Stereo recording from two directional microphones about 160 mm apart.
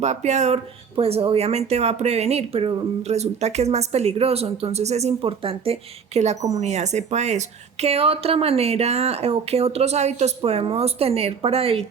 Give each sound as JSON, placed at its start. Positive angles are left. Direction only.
{"t": 0.0, "sound": "speech", "side_deg": -45}